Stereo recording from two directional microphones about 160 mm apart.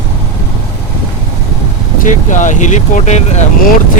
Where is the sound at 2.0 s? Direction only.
50° left (ahead or behind).